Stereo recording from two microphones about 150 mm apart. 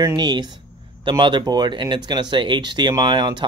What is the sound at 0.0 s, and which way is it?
Speech, 30° right (ahead or behind).